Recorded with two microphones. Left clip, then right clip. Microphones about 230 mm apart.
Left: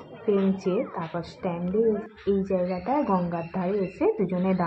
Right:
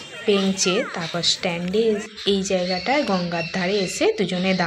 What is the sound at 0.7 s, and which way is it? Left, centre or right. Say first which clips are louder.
Speech: right 5 dB; centre.